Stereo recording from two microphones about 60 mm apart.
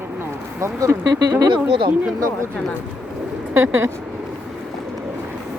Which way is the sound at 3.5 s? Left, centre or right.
Right.